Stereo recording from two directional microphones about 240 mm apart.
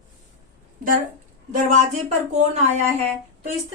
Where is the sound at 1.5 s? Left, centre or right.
Right.